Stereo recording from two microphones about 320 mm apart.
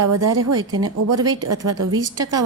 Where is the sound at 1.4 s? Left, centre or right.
Right.